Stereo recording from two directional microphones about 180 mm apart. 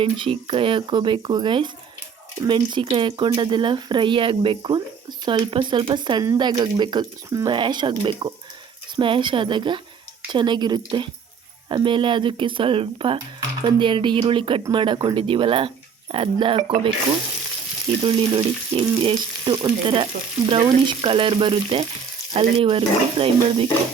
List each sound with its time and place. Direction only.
0.0 s speech: 30° right (ahead or behind)
18.0 s speech: 30° right (ahead or behind)